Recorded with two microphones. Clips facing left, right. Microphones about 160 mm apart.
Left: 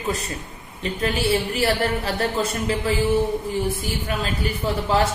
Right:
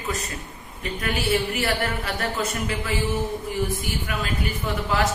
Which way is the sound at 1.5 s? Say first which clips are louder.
Left 4 dB; 30° left (ahead or behind).